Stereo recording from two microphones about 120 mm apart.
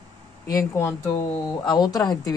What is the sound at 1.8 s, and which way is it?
Speech, 35° left (ahead or behind).